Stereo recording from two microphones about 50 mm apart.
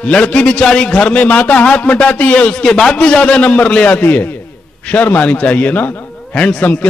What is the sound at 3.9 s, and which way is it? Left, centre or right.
A man's voice, left.